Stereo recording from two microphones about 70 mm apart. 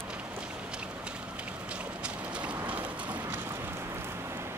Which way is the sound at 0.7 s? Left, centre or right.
Centre.